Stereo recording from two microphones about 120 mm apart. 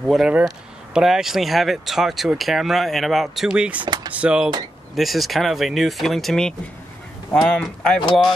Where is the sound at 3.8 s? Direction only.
40° right (ahead or behind).